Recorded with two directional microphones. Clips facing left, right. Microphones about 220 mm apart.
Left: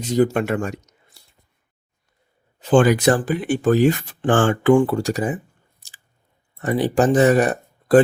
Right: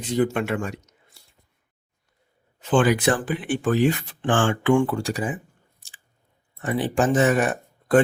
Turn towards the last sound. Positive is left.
turn(degrees=35)  # may be behind; listen again after turning